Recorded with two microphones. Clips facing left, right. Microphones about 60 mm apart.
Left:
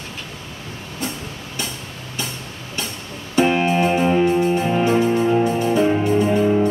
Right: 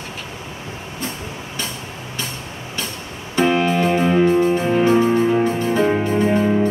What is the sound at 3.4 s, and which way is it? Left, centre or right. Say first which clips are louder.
Music: right 2 dB; left.